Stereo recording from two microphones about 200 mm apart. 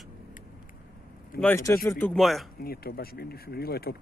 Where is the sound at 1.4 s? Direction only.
15° left (ahead or behind).